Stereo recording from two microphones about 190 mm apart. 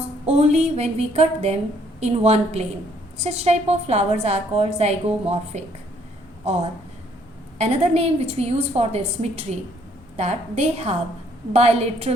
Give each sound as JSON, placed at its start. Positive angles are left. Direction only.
{"t": 0.3, "sound": "a woman's voice", "side_deg": -35}